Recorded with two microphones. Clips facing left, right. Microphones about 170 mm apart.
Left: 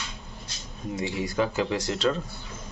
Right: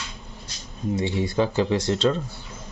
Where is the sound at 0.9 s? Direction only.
25° right (ahead or behind).